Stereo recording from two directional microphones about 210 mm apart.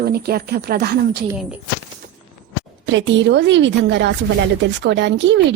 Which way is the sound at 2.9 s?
60° right (ahead or behind).